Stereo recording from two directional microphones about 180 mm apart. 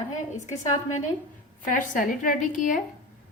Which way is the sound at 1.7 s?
45° left (ahead or behind).